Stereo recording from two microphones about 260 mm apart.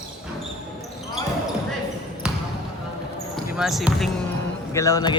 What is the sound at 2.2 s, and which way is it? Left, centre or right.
Basketball bounce, centre.